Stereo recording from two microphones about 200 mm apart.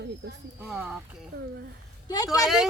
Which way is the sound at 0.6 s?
5° right (ahead or behind).